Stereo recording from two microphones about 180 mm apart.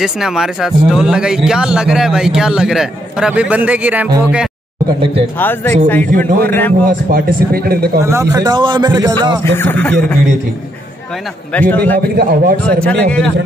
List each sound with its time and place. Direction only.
0.0 s a man's voice: 5° right (ahead or behind)
5.4 s a man's voice: 10° left (ahead or behind)
7.1 s speech: 55° right (ahead or behind)
8.0 s a man's voice: 15° right (ahead or behind)
9.4 s a man's voice: 10° left (ahead or behind)
11.5 s a man's voice: 10° left (ahead or behind)
12.2 s speech: 55° right (ahead or behind)
12.6 s a man's voice: 5° left (ahead or behind)